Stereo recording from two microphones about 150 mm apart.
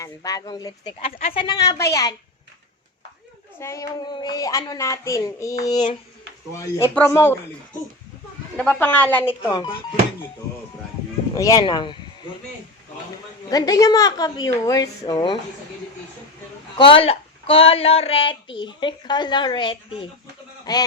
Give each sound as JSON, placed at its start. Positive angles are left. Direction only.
{"t": 0.0, "sound": "a woman's voice", "side_deg": 25}
{"t": 3.6, "sound": "a woman's voice", "side_deg": 20}
{"t": 8.5, "sound": "speech", "side_deg": 5}
{"t": 9.4, "sound": "speech", "side_deg": 30}
{"t": 11.3, "sound": "a woman's voice", "side_deg": 20}
{"t": 13.5, "sound": "a woman's voice", "side_deg": 25}
{"t": 16.7, "sound": "a woman's voice", "side_deg": 35}